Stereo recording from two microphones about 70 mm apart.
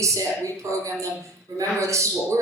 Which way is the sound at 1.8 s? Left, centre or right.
Right.